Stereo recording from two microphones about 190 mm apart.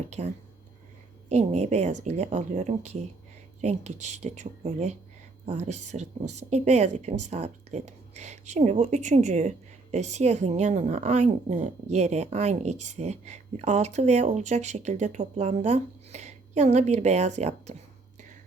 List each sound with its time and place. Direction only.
0.2 s a woman's voice: 40° right (ahead or behind)